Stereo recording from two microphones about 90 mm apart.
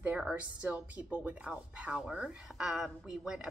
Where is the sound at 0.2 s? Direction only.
10° right (ahead or behind).